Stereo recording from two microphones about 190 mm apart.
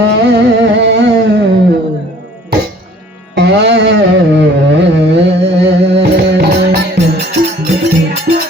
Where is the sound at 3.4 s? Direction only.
65° right (ahead or behind).